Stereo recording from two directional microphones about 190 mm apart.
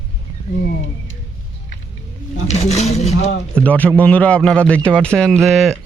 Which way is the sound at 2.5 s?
35° left (ahead or behind).